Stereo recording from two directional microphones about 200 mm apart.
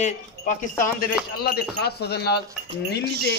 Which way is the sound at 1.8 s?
55° left (ahead or behind).